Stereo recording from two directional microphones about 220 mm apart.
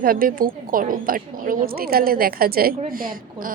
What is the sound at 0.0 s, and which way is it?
A woman's voice, 40° right (ahead or behind).